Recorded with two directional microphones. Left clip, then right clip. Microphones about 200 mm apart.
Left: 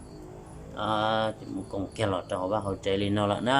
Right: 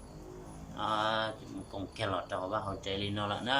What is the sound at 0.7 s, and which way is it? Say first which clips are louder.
A man's voice: left 5 dB; 30° left (ahead or behind).